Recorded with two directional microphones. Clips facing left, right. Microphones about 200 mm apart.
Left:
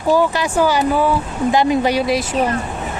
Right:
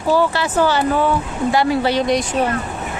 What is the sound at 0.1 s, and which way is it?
Speech, 15° left (ahead or behind).